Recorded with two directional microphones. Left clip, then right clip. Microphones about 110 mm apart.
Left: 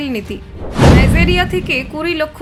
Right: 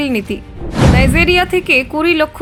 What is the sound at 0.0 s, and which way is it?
A woman's voice, 50° right (ahead or behind).